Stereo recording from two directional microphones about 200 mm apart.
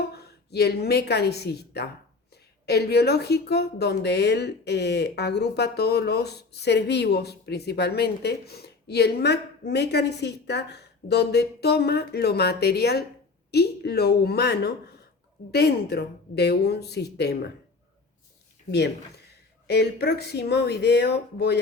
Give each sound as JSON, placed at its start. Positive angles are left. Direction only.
{"t": 0.1, "sound": "a woman's voice", "side_deg": 55}
{"t": 18.7, "sound": "speech", "side_deg": 55}